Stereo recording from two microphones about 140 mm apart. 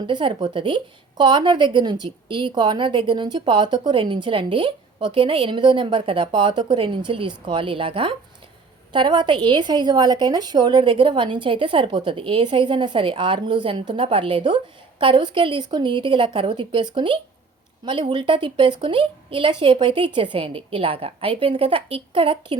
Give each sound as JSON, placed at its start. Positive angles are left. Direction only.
{"t": 0.1, "sound": "a woman's voice", "side_deg": -35}